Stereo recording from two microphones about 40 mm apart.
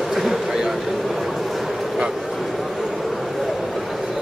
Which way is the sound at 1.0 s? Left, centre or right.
Centre.